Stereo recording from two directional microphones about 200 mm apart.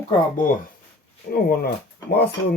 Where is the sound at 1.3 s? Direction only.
50° left (ahead or behind).